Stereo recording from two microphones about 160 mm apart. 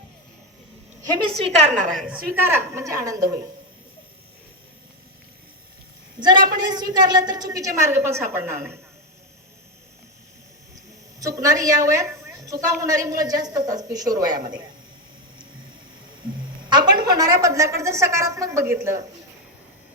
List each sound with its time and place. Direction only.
1.4 s a woman's voice: 45° right (ahead or behind)
2.4 s a woman's voice: 15° right (ahead or behind)
6.1 s a man's voice: 30° right (ahead or behind)
11.2 s a woman's voice: 20° right (ahead or behind)
16.6 s a sound: 30° right (ahead or behind)
17.1 s a woman's voice: 20° right (ahead or behind)